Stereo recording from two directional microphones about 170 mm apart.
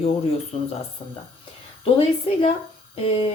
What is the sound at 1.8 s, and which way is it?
Speech, 35° left (ahead or behind).